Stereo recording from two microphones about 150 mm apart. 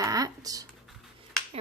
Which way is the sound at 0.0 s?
25° right (ahead or behind).